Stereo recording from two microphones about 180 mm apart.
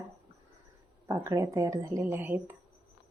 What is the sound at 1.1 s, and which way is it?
Speech, 15° right (ahead or behind).